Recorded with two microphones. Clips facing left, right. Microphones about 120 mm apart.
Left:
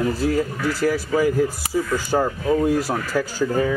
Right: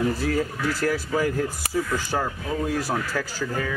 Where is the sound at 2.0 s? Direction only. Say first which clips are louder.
Left 7 dB; 15° left (ahead or behind).